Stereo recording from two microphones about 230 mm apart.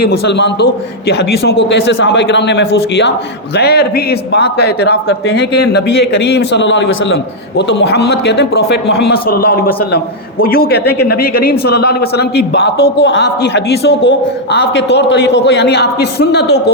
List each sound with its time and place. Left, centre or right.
0.3 s a man's voice: left